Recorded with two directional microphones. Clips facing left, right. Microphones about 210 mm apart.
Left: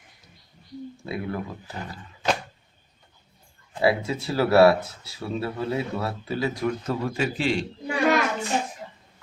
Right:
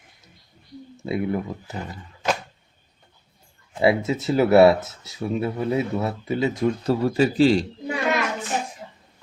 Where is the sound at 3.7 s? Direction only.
20° right (ahead or behind).